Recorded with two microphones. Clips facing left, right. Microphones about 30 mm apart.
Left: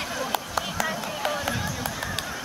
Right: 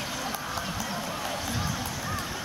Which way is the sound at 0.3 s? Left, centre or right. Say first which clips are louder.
Left 4 dB; left.